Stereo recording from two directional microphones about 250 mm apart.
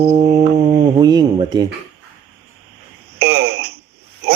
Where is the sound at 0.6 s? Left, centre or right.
Centre.